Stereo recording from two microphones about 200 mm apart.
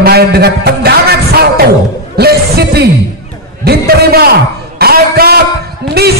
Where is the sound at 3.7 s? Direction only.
50° right (ahead or behind).